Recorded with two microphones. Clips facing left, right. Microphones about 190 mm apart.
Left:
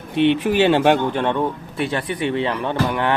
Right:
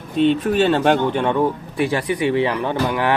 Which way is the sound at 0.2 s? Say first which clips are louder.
Even; 70° left (ahead or behind).